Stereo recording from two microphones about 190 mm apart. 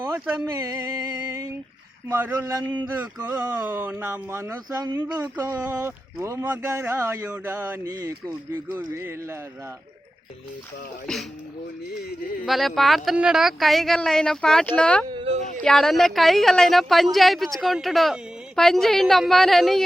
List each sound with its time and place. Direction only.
0.4 s speech: 15° right (ahead or behind)
11.0 s speech: centre (ahead or behind)
12.5 s speech: centre (ahead or behind)
15.1 s speech: 30° right (ahead or behind)
15.6 s speech: centre (ahead or behind)